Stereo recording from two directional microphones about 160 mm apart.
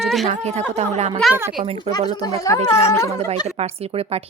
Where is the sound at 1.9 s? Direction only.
25° left (ahead or behind).